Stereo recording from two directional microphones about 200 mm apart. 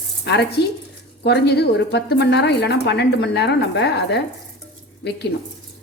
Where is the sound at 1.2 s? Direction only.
55° left (ahead or behind).